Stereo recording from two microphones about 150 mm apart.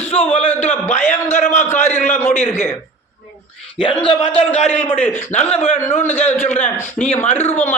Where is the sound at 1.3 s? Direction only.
55° left (ahead or behind).